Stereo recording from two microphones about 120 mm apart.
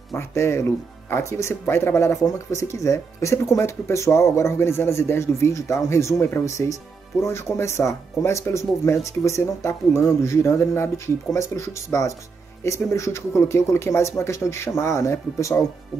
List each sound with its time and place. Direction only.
0.1 s speech: 25° left (ahead or behind)